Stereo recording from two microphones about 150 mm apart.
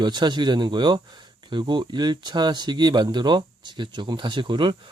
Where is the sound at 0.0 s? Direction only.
30° right (ahead or behind).